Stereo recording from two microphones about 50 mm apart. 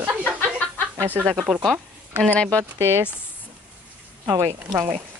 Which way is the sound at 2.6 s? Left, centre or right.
Right.